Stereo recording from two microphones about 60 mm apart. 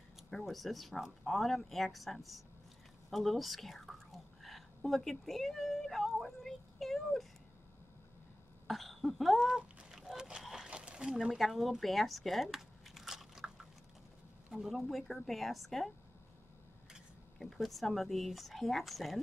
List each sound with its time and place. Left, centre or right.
0.3 s speech: centre
3.1 s whispering: centre
6.2 s a sound: centre
8.6 s throat clearing: centre
9.6 s fowl: centre
9.9 s a sound: centre
11.3 s speech: centre
11.8 s biting: centre
14.5 s speech: centre
17.6 s speech: centre